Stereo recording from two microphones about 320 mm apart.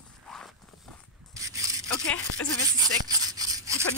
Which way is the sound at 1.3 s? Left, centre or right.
Centre.